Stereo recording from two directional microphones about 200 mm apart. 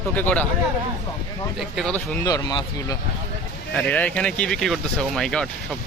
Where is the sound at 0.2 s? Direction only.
10° left (ahead or behind).